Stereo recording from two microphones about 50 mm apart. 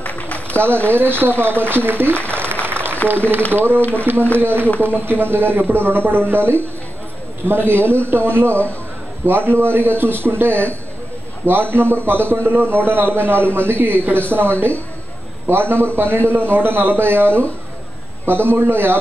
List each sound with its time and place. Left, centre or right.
0.0 s a sound: left
0.8 s a man's voice: right
2.2 s applause: right
3.5 s a man's voice: right